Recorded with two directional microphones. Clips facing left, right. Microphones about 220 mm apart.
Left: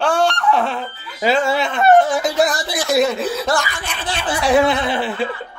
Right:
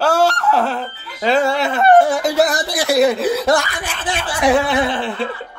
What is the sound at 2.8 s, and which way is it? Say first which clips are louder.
Speech: right 3 dB; 15° right (ahead or behind).